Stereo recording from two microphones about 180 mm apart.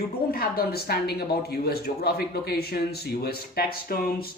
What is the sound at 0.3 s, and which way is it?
Speech, 60° left (ahead or behind).